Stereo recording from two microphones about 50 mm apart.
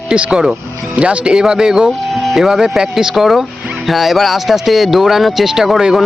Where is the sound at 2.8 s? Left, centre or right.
Centre.